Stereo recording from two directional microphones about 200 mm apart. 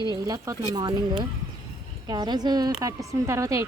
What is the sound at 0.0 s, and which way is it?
Speech, 20° right (ahead or behind).